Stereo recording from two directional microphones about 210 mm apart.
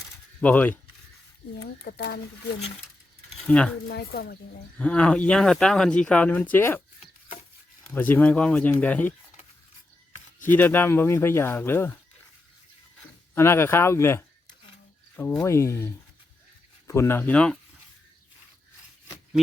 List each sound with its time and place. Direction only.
0.4 s speech: 10° left (ahead or behind)
1.5 s speech: 55° left (ahead or behind)
3.4 s speech: 5° left (ahead or behind)
3.8 s speech: 50° left (ahead or behind)
4.8 s speech: 5° left (ahead or behind)
7.9 s speech: 10° left (ahead or behind)
10.5 s speech: 10° left (ahead or behind)
13.3 s speech: 10° left (ahead or behind)